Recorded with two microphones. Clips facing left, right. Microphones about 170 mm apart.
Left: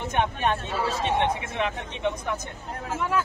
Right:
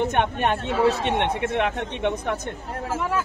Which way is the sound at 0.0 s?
60° right (ahead or behind).